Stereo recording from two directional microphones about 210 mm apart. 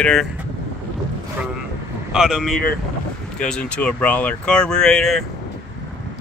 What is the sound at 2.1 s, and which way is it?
Speech, 5° right (ahead or behind).